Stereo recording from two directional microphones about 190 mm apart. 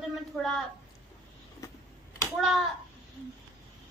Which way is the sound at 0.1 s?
Centre (ahead or behind).